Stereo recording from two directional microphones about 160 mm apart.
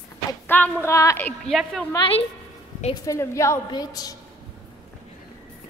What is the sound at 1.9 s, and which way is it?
Speech, 35° left (ahead or behind).